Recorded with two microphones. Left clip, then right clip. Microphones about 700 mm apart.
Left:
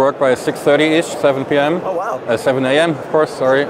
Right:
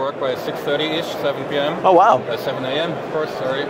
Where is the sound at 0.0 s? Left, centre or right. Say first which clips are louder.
Left 8 dB; left.